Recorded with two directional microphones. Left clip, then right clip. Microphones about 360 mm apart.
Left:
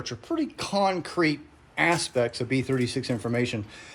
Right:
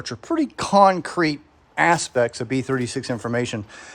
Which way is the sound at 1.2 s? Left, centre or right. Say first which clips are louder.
Right 2 dB; centre.